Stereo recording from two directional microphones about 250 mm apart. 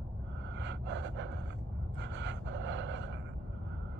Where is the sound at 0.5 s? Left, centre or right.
Right.